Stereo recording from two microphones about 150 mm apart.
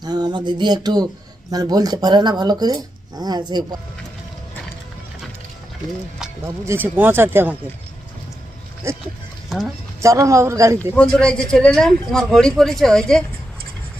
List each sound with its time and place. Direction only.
0.0 s speech: 30° right (ahead or behind)
6.4 s speech: 15° right (ahead or behind)
8.8 s speech: 20° right (ahead or behind)
9.5 s speech: centre (ahead or behind)
10.0 s speech: 20° right (ahead or behind)
10.9 s a man's voice: 5° left (ahead or behind)